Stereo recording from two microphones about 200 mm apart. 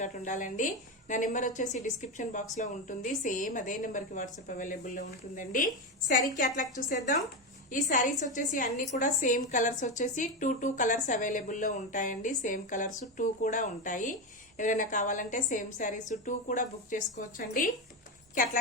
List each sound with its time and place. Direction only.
0.0 s a woman's voice: 40° left (ahead or behind)
7.7 s a woman's voice: 40° left (ahead or behind)